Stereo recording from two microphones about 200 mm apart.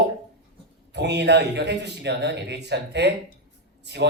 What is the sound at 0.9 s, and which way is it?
Speech, 60° right (ahead or behind).